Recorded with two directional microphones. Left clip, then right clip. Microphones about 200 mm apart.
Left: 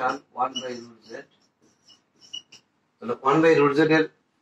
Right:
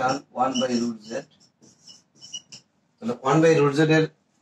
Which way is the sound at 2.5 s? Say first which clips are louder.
Right 4 dB; 50° right (ahead or behind).